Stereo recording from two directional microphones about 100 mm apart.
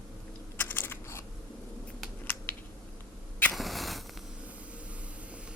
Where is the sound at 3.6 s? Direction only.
Centre (ahead or behind).